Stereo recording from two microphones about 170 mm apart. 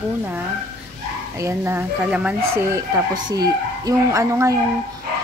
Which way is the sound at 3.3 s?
20° right (ahead or behind).